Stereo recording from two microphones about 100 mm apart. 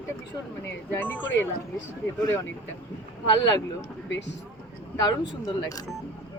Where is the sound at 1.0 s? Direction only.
20° left (ahead or behind).